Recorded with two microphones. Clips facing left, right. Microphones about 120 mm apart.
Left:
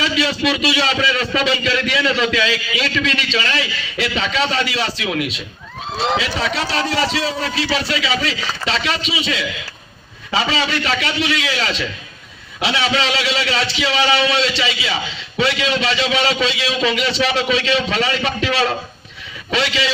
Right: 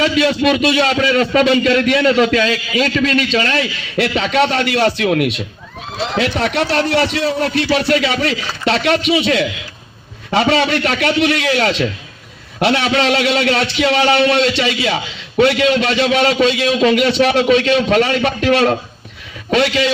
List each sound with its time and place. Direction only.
0.0 s a man's voice: 50° right (ahead or behind)